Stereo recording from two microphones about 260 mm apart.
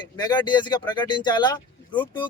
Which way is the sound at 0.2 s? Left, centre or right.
Centre.